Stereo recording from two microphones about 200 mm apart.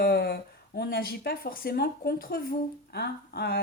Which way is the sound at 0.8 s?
50° left (ahead or behind).